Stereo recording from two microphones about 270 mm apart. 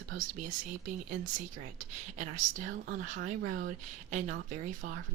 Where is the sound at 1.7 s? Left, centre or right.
Right.